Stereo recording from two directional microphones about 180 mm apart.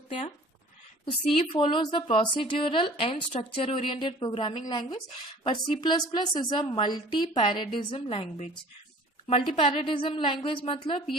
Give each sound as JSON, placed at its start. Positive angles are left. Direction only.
{"t": 1.3, "sound": "speech", "side_deg": 30}